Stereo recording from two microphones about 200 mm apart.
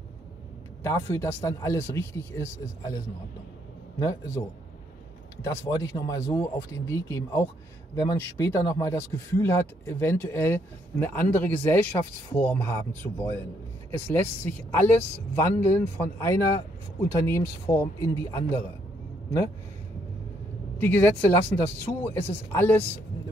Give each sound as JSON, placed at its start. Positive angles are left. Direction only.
{"t": 0.8, "sound": "speech", "side_deg": 15}
{"t": 4.0, "sound": "speech", "side_deg": 15}
{"t": 20.7, "sound": "speech", "side_deg": 10}
{"t": 21.5, "sound": "speech", "side_deg": 30}
{"t": 22.0, "sound": "speech", "side_deg": 10}